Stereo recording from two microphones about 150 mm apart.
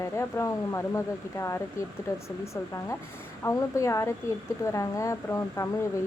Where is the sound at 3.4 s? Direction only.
20° left (ahead or behind).